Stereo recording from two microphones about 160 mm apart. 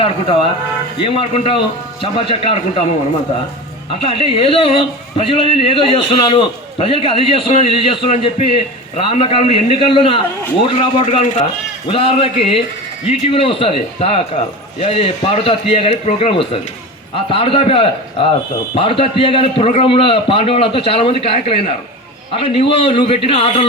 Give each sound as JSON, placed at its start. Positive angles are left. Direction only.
{"t": 1.0, "sound": "a man's voice", "side_deg": 35}
{"t": 4.0, "sound": "a man's voice", "side_deg": 35}